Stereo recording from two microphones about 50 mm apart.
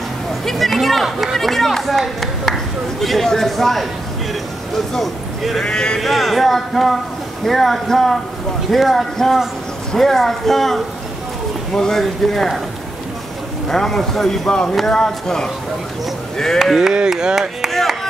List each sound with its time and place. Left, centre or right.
0.5 s speech: centre
5.7 s speech: centre
5.9 s speech: centre
13.7 s speech: centre
14.5 s speech: centre
16.7 s speech: centre
17.6 s speech: centre